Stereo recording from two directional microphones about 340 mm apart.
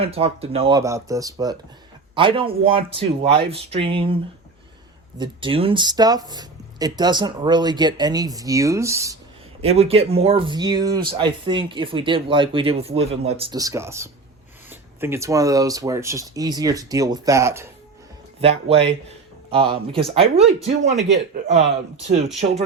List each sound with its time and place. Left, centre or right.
0.0 s a man's voice: centre